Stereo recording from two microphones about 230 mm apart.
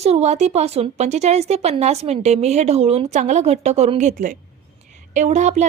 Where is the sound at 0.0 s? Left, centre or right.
Right.